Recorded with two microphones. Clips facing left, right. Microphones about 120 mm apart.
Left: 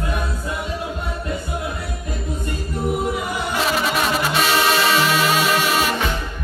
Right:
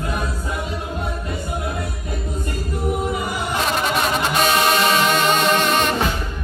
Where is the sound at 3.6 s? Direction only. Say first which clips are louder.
Even; centre (ahead or behind).